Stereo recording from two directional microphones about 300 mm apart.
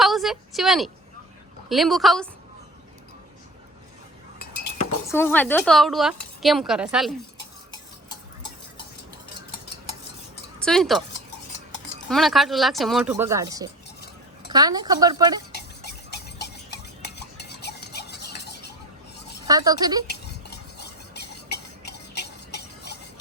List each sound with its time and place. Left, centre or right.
0.0 s a sound: centre
1.7 s speech: centre
5.1 s speech: centre
10.6 s speech: centre
12.0 s speech: centre
15.8 s stir: left
19.5 s speech: centre
20.1 s stir: left